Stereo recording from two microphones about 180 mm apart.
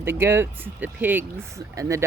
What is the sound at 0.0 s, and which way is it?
Speech, 15° right (ahead or behind).